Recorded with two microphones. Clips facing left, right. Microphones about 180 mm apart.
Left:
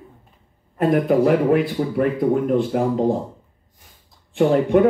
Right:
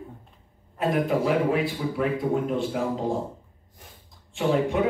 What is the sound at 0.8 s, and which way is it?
Speech, 55° left (ahead or behind).